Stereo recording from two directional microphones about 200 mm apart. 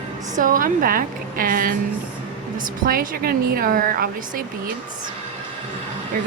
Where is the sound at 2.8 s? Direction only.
45° right (ahead or behind).